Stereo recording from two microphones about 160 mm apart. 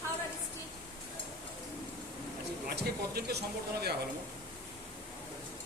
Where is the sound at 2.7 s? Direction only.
80° right.